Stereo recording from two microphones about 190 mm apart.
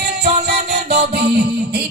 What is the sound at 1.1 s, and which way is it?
Music, 55° right (ahead or behind).